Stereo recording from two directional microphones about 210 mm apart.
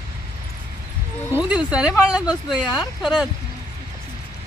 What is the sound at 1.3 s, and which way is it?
Speech, 5° right (ahead or behind).